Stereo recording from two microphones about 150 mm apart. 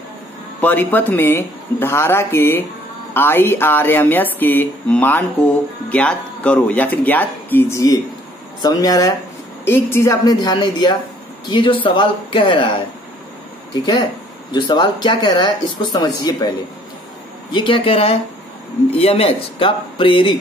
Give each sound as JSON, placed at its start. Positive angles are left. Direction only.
{"t": 0.6, "sound": "speech", "side_deg": 10}
{"t": 14.5, "sound": "speech", "side_deg": 30}